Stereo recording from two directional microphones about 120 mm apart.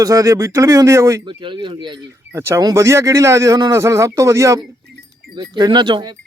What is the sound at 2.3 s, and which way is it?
Speech, 25° right (ahead or behind).